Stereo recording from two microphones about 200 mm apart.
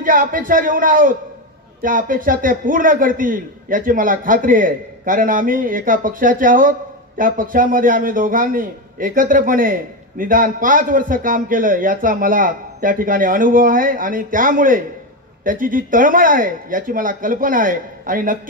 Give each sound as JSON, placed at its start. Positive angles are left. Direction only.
{"t": 0.0, "sound": "a man's voice", "side_deg": -45}